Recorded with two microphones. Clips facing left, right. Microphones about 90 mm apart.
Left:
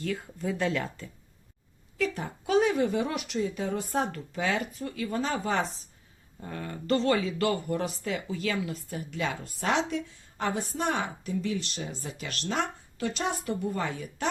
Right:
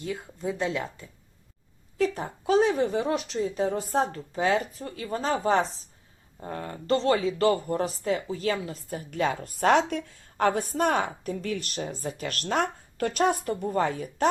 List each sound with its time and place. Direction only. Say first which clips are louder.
0.0 s speech: even; 20° right (ahead or behind)
2.0 s a woman's voice: right 4 dB; 35° right (ahead or behind)